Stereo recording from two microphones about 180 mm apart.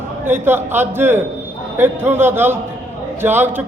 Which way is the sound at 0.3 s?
10° right (ahead or behind).